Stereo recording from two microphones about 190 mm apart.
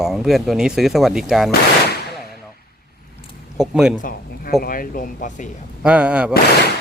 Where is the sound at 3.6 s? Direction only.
5° right (ahead or behind).